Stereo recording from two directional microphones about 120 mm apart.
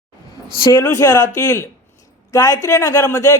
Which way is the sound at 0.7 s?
30° left (ahead or behind).